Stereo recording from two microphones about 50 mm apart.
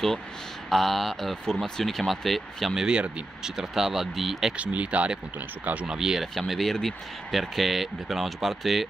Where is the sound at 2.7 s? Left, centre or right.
Centre.